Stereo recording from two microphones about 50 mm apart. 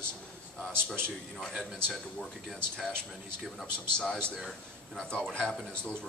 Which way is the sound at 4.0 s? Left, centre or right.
Centre.